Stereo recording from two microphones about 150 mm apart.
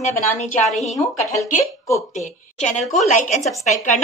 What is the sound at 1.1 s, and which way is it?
A woman's voice, 45° left (ahead or behind).